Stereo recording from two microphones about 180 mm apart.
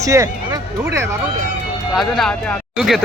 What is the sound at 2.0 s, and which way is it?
Speech, centre (ahead or behind).